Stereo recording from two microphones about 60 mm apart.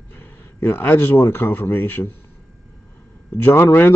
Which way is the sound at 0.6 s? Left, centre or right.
Left.